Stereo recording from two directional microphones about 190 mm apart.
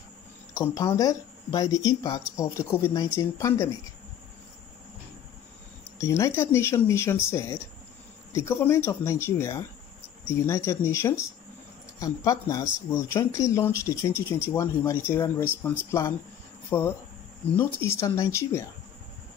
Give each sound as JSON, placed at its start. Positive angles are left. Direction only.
{"t": 0.6, "sound": "speech", "side_deg": 20}
{"t": 5.9, "sound": "speech", "side_deg": 15}
{"t": 16.7, "sound": "speech", "side_deg": 10}